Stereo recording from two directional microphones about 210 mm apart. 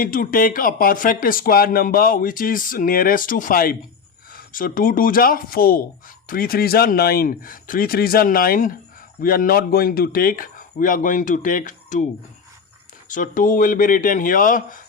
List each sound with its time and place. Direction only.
0.0 s speech: 40° left (ahead or behind)
13.1 s speech: 40° left (ahead or behind)